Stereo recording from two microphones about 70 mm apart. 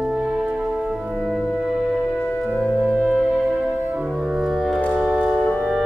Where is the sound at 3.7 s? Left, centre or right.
Centre.